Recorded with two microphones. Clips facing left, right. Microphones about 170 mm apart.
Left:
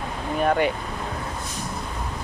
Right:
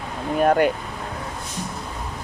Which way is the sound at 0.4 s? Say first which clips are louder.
Right 4 dB; 50° right (ahead or behind).